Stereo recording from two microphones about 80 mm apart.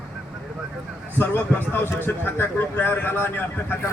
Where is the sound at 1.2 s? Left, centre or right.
Left.